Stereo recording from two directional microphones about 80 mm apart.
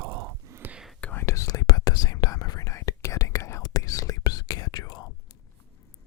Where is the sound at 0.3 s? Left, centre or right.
Right.